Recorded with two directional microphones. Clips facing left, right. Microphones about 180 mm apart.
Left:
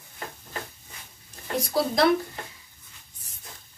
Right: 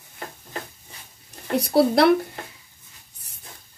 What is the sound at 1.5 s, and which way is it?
Speech, 65° right (ahead or behind).